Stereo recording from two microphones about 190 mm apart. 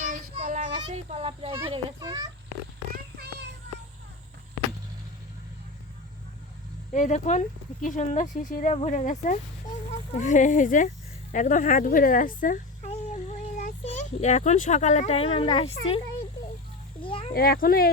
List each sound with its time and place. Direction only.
0.0 s child singing: 40° right (ahead or behind)
0.9 s a child's voice: 35° right (ahead or behind)
2.0 s a child's voice: 20° right (ahead or behind)
2.9 s a sound: 60° right (ahead or behind)
6.9 s speech: 40° left (ahead or behind)
17.0 s a sound: 25° left (ahead or behind)
17.3 s speech: 50° left (ahead or behind)